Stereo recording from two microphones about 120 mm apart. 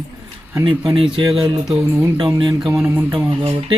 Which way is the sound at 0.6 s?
40° right (ahead or behind).